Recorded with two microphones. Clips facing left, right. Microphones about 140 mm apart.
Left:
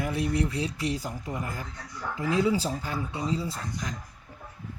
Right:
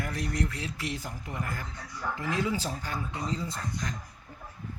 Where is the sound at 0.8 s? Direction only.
35° left (ahead or behind).